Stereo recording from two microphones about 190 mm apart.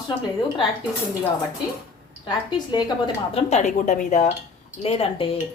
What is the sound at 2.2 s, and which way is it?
A woman's voice, 25° left (ahead or behind).